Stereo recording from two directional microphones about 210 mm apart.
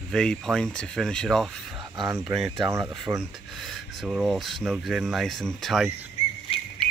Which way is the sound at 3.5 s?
Centre (ahead or behind).